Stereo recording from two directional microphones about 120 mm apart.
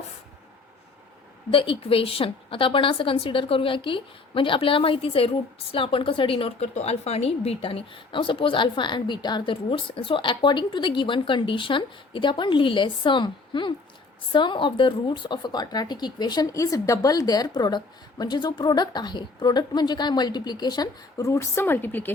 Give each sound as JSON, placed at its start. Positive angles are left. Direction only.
{"t": 1.5, "sound": "a woman's voice", "side_deg": 50}
{"t": 6.7, "sound": "a woman's voice", "side_deg": 60}